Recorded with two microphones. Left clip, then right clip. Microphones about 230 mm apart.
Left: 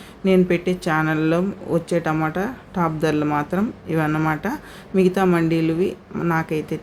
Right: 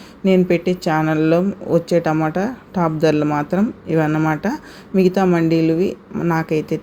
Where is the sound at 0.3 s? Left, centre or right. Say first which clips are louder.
Right 2 dB; centre.